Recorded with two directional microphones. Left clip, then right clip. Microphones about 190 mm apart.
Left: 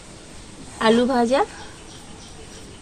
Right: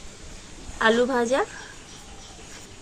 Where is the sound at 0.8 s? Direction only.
5° right (ahead or behind).